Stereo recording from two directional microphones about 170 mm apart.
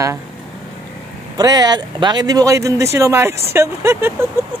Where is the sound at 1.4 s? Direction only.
25° right (ahead or behind).